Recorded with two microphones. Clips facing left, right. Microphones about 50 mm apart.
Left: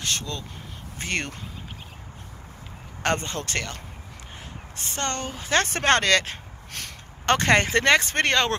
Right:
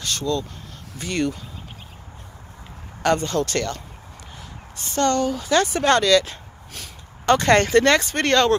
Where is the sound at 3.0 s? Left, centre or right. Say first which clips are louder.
Right 5 dB; left.